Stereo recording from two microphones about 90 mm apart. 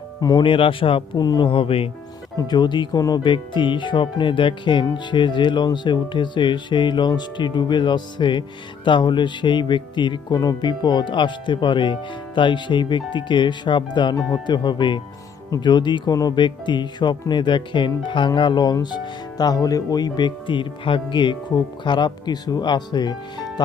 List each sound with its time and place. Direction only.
0.2 s speech: 45° left (ahead or behind)
0.4 s speech: 75° left (ahead or behind)
1.1 s speech: 50° left (ahead or behind)
1.5 s speech: 85° left
2.5 s speech: 55° left (ahead or behind)
10.3 s speech: 50° left (ahead or behind)